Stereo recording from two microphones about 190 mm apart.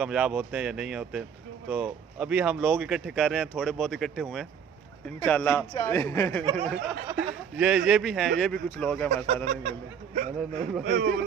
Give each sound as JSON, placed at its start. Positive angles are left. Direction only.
{"t": 0.0, "sound": "speech", "side_deg": -5}
{"t": 6.4, "sound": "speech", "side_deg": -20}
{"t": 7.5, "sound": "speech", "side_deg": -5}
{"t": 9.1, "sound": "speech", "side_deg": -40}